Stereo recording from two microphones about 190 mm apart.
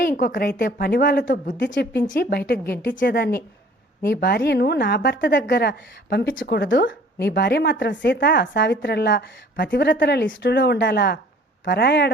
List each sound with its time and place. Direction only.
0.0 s a woman's voice: 45° left (ahead or behind); by 1.9 s 65° left (ahead or behind)
3.0 s a woman's voice: 60° left (ahead or behind)